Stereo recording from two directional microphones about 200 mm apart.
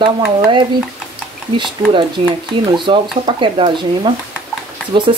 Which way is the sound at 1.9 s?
25° right (ahead or behind).